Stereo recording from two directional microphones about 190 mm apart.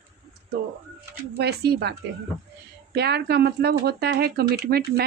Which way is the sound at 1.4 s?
60° right (ahead or behind).